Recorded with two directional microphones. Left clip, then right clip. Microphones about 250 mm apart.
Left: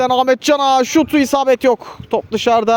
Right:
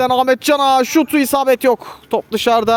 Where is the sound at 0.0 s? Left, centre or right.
Centre.